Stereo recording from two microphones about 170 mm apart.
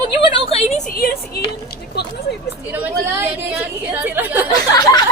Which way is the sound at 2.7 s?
10° right (ahead or behind).